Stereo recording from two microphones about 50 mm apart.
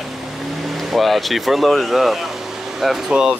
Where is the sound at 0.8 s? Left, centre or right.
Centre.